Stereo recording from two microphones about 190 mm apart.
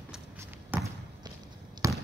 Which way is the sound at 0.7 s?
10° right (ahead or behind).